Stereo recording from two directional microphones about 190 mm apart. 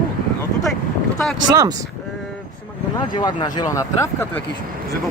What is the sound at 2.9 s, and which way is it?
Speech, 20° left (ahead or behind).